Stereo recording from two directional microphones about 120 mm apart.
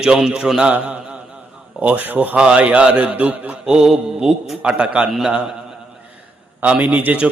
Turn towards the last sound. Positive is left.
turn(degrees=-10)  # may be behind; listen again after turning